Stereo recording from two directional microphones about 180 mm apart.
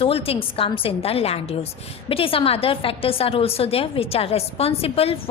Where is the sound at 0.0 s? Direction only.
30° left (ahead or behind).